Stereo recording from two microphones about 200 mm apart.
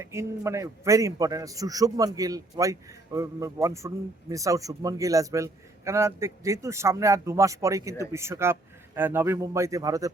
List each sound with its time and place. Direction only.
0.0 s a man's voice: 15° right (ahead or behind)